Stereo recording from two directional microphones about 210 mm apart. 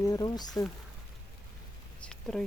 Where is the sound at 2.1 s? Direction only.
Centre (ahead or behind).